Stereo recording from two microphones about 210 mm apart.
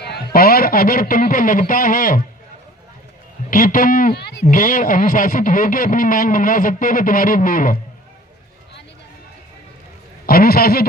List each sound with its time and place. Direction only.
0.0 s a man's voice: 50° left (ahead or behind)
3.5 s speech: 40° left (ahead or behind)
10.2 s a man's voice: 45° left (ahead or behind)